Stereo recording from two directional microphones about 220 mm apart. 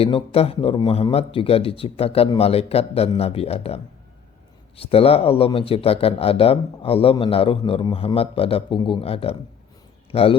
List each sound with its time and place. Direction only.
0.0 s speech: 25° left (ahead or behind)
4.8 s speech: 25° left (ahead or behind)